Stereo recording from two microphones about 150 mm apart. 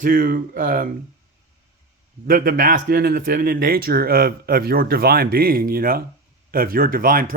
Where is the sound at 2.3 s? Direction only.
70° right (ahead or behind).